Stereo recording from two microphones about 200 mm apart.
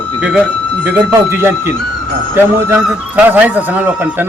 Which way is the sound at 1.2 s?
10° right (ahead or behind).